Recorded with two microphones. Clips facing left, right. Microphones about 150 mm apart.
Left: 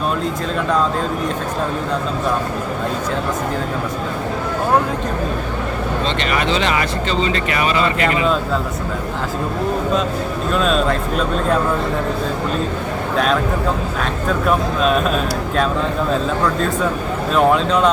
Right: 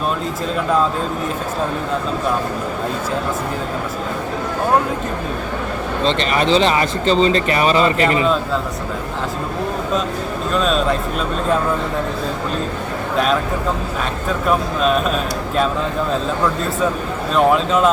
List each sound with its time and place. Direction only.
6.1 s speech: 35° right (ahead or behind)
10.5 s speech: centre (ahead or behind)
13.1 s speech: centre (ahead or behind)
14.4 s speech: centre (ahead or behind)
17.3 s speech: centre (ahead or behind)